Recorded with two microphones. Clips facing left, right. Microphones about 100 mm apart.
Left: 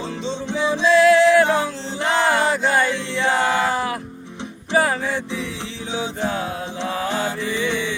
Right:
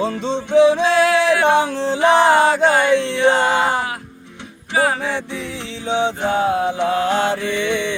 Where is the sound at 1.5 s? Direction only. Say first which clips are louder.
Right 6 dB; 65° right (ahead or behind).